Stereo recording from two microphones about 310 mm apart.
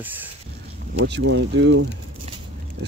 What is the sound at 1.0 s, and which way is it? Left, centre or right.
Speech, right.